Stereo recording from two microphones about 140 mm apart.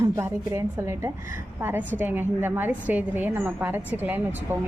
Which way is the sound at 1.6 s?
10° right (ahead or behind).